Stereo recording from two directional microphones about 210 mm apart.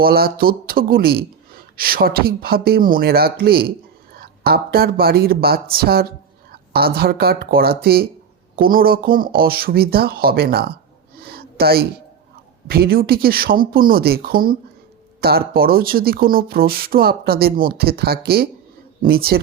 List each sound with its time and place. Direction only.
0.0 s speech: 45° right (ahead or behind)
11.2 s a sound: 45° right (ahead or behind)
12.6 s speech: 45° right (ahead or behind)